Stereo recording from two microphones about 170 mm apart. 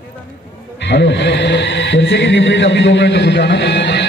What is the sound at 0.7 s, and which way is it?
A man's voice, 90° left.